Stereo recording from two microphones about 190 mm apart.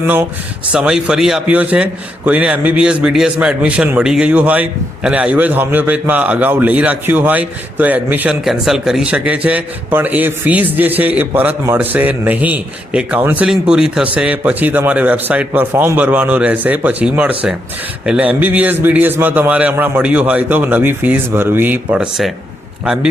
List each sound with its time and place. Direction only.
0.7 s a man's voice: 5° right (ahead or behind)